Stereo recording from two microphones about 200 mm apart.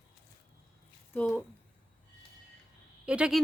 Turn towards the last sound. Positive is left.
turn(degrees=-5)  # may be behind; listen again after turning